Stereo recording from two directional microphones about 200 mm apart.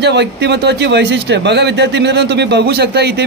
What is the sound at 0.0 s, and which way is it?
Speech, 60° right (ahead or behind).